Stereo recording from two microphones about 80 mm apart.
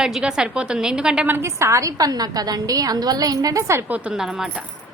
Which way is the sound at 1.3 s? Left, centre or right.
Right.